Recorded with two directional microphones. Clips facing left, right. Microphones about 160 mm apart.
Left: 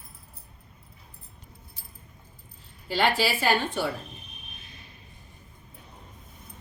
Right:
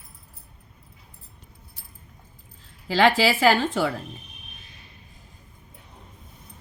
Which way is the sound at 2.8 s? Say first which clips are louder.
Right 6 dB; 90° right.